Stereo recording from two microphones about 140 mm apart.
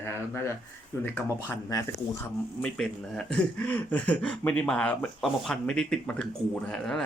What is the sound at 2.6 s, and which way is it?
Speech, 5° left (ahead or behind).